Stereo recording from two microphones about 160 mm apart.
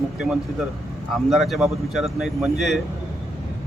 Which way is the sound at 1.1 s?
Centre (ahead or behind).